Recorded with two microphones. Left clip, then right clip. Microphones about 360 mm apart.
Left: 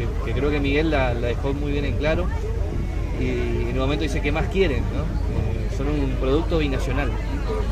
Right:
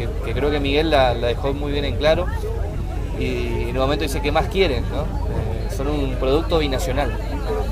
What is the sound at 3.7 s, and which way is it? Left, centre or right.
Speech, right.